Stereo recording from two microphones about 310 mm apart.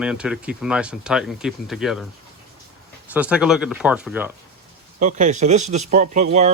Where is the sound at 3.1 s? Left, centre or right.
Centre.